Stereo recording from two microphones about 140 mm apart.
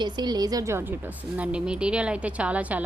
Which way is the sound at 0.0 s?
30° right (ahead or behind).